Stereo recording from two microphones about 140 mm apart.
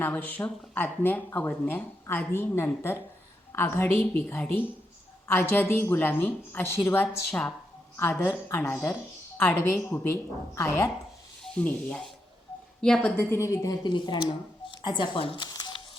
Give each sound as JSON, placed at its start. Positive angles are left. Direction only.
{"t": 0.0, "sound": "speech", "side_deg": 10}
{"t": 13.1, "sound": "speech", "side_deg": 15}
{"t": 15.4, "sound": "a sound", "side_deg": 30}